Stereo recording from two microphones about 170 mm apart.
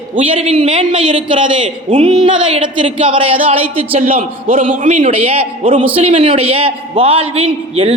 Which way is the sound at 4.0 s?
50° right (ahead or behind).